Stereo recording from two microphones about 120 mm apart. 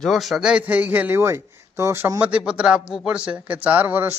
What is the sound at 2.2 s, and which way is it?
Speech, 10° right (ahead or behind).